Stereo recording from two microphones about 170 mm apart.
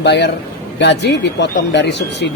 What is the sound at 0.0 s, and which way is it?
Speech, 85° left.